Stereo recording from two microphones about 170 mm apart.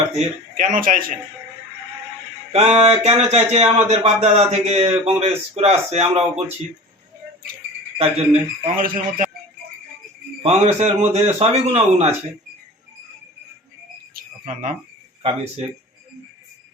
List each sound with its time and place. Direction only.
0.2 s a man's voice: 50° right (ahead or behind)
2.5 s speech: 35° right (ahead or behind)
7.9 s speech: 35° right (ahead or behind)
8.7 s speech: 55° right (ahead or behind)
10.4 s speech: 40° right (ahead or behind)
14.1 s cricket: 55° right (ahead or behind)